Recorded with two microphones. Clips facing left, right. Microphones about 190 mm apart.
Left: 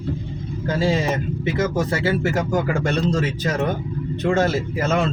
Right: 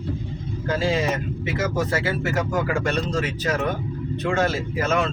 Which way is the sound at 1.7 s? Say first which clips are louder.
Left 3 dB; 30° left (ahead or behind).